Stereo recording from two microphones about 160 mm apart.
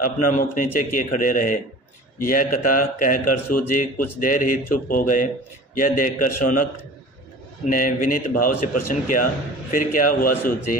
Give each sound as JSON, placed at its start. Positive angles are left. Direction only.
{"t": 0.0, "sound": "speech", "side_deg": 55}